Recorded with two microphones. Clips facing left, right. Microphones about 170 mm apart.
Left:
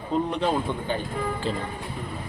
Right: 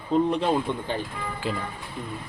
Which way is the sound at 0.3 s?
Centre (ahead or behind).